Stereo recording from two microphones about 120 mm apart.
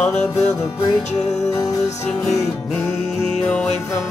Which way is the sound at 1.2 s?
70° left (ahead or behind).